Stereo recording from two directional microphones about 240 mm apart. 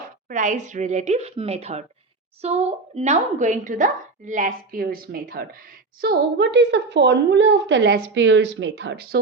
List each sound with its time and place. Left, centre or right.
0.0 s a woman's voice: right